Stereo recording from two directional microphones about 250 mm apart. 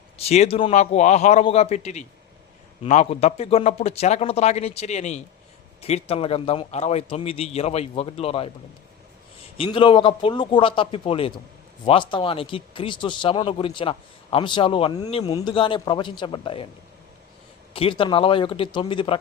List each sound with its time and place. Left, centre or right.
0.2 s a man's voice: left
9.6 s a man's voice: centre
17.7 s a man's voice: left